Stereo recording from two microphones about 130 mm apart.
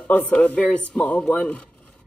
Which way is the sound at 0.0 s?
10° left (ahead or behind).